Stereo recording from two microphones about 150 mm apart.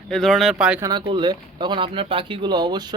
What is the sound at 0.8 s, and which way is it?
Speech, 30° right (ahead or behind).